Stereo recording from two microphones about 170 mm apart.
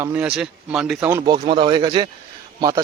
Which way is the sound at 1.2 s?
25° right (ahead or behind).